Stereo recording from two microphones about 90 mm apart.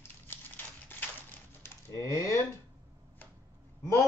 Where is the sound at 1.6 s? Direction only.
40° left (ahead or behind).